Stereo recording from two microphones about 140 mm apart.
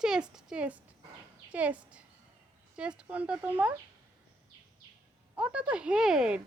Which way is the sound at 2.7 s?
10° right (ahead or behind).